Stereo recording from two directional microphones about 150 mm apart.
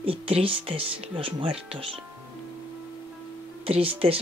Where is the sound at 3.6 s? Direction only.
40° right (ahead or behind).